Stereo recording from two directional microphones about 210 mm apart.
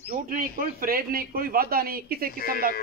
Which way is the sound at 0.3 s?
40° right (ahead or behind).